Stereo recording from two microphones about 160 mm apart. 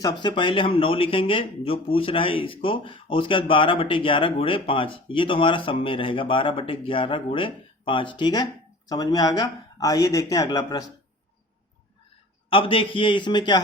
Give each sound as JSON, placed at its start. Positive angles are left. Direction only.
{"t": 0.0, "sound": "speech", "side_deg": 30}
{"t": 12.5, "sound": "speech", "side_deg": 35}